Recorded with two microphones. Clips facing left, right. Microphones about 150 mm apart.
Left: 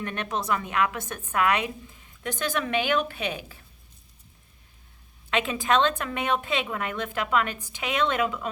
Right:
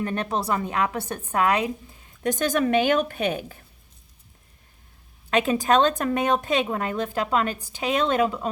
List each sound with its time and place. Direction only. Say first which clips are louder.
0.0 s a woman's voice: right 4 dB; 35° right (ahead or behind)
2.4 s a woman's voice: right 6 dB; 45° right (ahead or behind)
5.3 s a woman's voice: right 4 dB; 40° right (ahead or behind)